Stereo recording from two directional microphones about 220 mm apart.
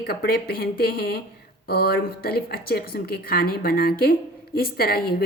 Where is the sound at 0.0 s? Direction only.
45° left (ahead or behind).